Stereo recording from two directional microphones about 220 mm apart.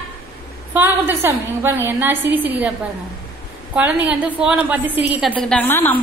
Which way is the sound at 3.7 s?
5° right (ahead or behind).